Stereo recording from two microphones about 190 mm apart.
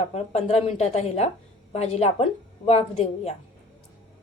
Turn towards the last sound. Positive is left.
turn(degrees=35)  # may be behind; listen again after turning